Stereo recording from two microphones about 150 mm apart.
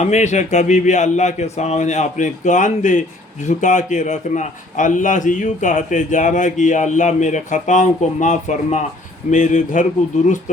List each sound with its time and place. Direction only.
0.0 s a man's voice: 50° left (ahead or behind)